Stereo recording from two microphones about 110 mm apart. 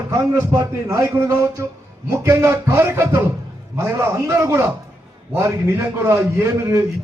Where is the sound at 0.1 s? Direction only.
25° right (ahead or behind).